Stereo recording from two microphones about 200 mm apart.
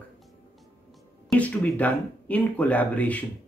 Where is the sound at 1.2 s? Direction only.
5° left (ahead or behind).